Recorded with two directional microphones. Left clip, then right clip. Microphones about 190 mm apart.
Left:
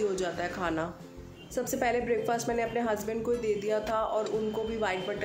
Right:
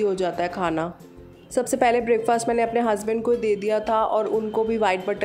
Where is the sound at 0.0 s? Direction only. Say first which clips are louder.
Right 8 dB; 35° right (ahead or behind).